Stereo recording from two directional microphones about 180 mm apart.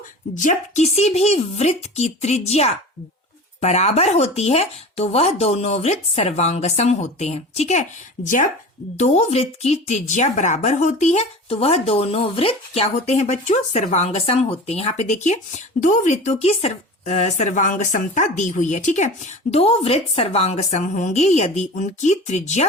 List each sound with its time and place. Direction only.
0.3 s speech: 40° left (ahead or behind)